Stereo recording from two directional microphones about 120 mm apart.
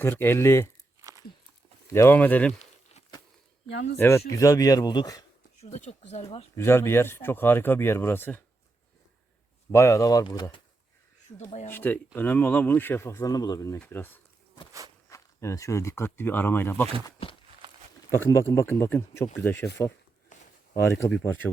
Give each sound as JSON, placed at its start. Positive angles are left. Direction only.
{"t": 0.0, "sound": "speech", "side_deg": 20}
{"t": 1.9, "sound": "speech", "side_deg": 20}
{"t": 2.5, "sound": "a sound", "side_deg": 70}
{"t": 3.9, "sound": "speech", "side_deg": 20}
{"t": 5.5, "sound": "speech", "side_deg": 70}
{"t": 6.6, "sound": "speech", "side_deg": 20}
{"t": 9.7, "sound": "speech", "side_deg": 25}
{"t": 11.3, "sound": "speech", "side_deg": 65}
{"t": 11.7, "sound": "speech", "side_deg": 15}
{"t": 13.7, "sound": "speech", "side_deg": 15}
{"t": 15.1, "sound": "speech", "side_deg": 25}
{"t": 18.1, "sound": "speech", "side_deg": 25}
{"t": 20.9, "sound": "speech", "side_deg": 15}